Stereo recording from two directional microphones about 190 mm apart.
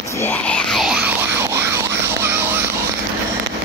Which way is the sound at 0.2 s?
10° left (ahead or behind).